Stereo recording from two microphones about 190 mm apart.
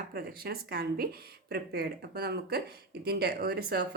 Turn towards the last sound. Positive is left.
turn(degrees=-55)  # may be behind; listen again after turning